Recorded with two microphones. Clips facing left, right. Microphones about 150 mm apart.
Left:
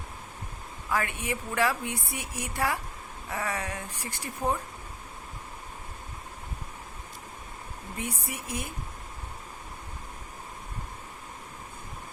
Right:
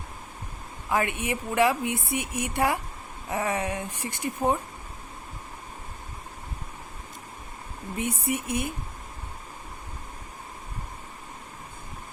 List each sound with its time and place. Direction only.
0.9 s speech: 20° right (ahead or behind)
7.9 s speech: 20° right (ahead or behind)